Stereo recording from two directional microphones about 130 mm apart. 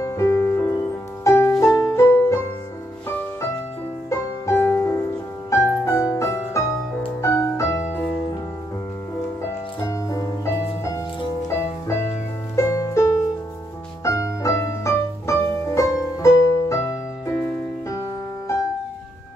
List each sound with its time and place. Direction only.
0.0 s music: 25° left (ahead or behind)
4.1 s music: 20° left (ahead or behind)
9.8 s music: 25° left (ahead or behind)